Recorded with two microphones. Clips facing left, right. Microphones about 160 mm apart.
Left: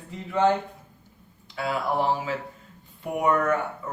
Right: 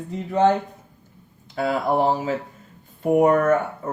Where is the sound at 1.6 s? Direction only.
45° right (ahead or behind).